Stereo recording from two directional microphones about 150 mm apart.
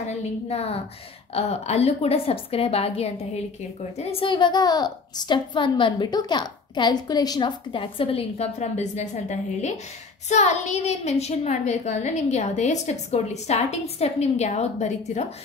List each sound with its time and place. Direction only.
0.0 s a woman's voice: 45° left (ahead or behind)